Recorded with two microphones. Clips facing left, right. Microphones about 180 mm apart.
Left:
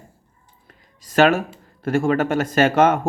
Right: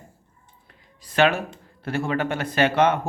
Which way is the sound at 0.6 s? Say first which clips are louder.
Left 3 dB; 45° left (ahead or behind).